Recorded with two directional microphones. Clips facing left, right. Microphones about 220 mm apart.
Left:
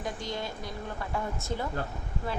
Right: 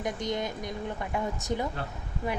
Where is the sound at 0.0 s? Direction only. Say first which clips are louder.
Right 4 dB; 20° right (ahead or behind).